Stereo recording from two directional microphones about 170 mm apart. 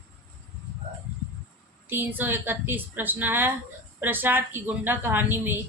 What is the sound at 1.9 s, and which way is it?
A woman's voice, 10° right (ahead or behind).